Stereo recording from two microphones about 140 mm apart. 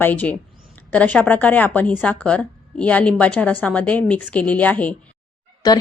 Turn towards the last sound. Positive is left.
turn(degrees=30)  # may be behind; listen again after turning